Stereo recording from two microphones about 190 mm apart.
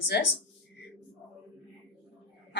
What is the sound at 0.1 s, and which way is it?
Speech, 60° left (ahead or behind).